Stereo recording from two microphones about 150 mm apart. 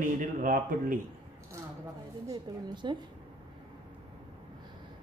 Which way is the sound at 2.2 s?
30° right (ahead or behind).